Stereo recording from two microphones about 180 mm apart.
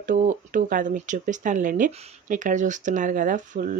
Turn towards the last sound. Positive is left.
turn(degrees=-50)  # may be behind; listen again after turning